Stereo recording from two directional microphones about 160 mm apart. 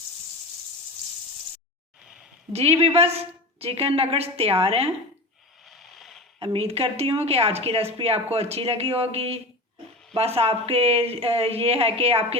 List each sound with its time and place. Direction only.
2.5 s a woman's voice: 40° right (ahead or behind)
5.6 s a sound: centre (ahead or behind)
6.4 s a woman's voice: 40° right (ahead or behind)